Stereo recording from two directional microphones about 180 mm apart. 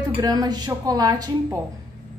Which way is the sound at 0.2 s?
20° right (ahead or behind).